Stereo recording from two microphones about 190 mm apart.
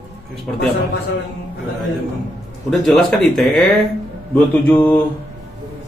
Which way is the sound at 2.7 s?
5° left (ahead or behind).